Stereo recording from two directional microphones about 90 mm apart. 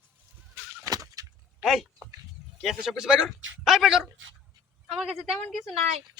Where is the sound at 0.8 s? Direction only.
40° right (ahead or behind).